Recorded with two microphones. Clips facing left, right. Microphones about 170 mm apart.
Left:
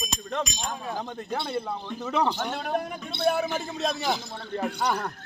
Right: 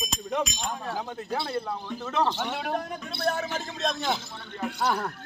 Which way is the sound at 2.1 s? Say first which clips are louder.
Left 1 dB; 10° left (ahead or behind).